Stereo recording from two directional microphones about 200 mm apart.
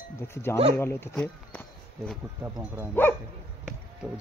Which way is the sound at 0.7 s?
10° left (ahead or behind).